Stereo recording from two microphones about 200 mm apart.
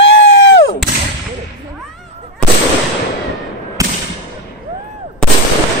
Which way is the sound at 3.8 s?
15° right (ahead or behind).